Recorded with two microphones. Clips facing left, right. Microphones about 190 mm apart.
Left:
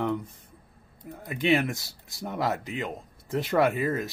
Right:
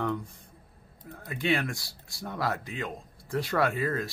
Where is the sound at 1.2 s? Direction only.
20° left (ahead or behind).